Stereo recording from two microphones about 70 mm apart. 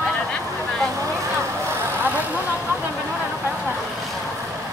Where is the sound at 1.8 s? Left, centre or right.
Right.